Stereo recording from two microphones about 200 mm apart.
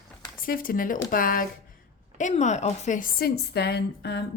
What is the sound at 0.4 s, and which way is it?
A woman's voice, 45° left (ahead or behind).